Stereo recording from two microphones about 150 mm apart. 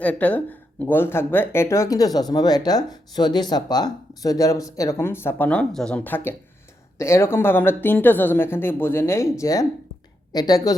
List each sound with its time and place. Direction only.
0.0 s speech: 10° left (ahead or behind)